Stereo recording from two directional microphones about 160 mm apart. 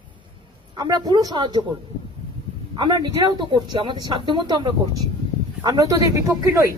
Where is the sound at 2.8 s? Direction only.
30° right (ahead or behind).